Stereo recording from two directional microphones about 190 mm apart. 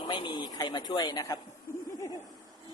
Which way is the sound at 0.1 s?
25° left (ahead or behind).